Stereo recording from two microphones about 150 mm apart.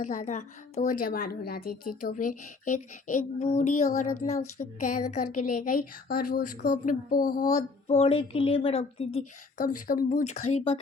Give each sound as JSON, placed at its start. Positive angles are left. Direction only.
{"t": 0.0, "sound": "a woman's voice", "side_deg": 55}
{"t": 7.9, "sound": "a woman's voice", "side_deg": 40}
{"t": 9.6, "sound": "a woman's voice", "side_deg": 65}